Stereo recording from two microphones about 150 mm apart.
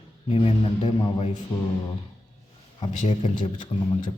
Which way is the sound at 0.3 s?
40° left (ahead or behind).